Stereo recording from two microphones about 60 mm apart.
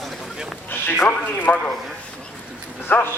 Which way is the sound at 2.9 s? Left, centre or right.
Left.